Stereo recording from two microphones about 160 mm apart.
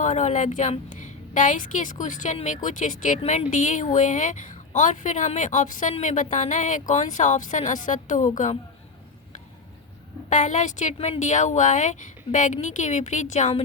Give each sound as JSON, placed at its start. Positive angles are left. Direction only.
{"t": 0.0, "sound": "a woman's voice", "side_deg": 50}
{"t": 10.2, "sound": "a woman's voice", "side_deg": 50}
{"t": 10.9, "sound": "speech", "side_deg": 35}
{"t": 11.2, "sound": "a woman's voice", "side_deg": 50}